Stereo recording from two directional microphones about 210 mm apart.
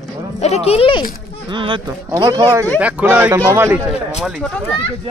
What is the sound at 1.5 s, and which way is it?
Speech, 25° right (ahead or behind).